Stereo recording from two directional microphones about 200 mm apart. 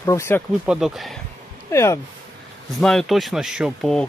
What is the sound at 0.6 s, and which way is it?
Speech, 5° right (ahead or behind).